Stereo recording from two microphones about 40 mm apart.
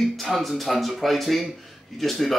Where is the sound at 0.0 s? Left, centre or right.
Centre.